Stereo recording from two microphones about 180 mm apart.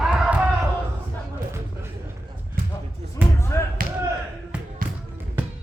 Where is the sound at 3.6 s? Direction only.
15° left (ahead or behind).